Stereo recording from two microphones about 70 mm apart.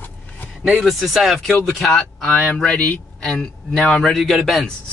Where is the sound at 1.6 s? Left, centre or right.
Centre.